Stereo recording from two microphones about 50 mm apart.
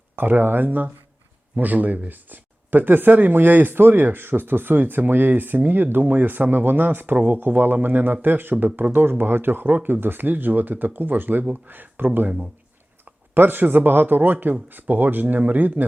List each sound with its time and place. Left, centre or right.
0.2 s speech: right
14.3 s speech: right
14.7 s speech: right